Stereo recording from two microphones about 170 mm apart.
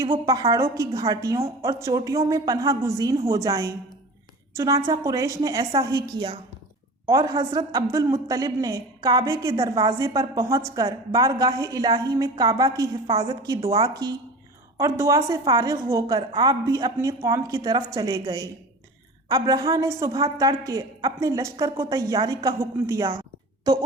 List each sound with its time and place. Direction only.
0.3 s a woman's voice: 20° right (ahead or behind)